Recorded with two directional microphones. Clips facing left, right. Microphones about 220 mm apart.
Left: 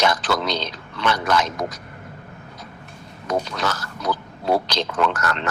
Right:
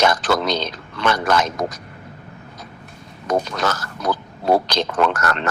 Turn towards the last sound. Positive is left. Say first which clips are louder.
# right 3 dB
turn(degrees=-50)  # may be behind; listen again after turning